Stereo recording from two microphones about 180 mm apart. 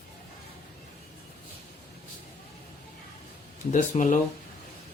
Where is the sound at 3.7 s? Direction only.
45° left (ahead or behind).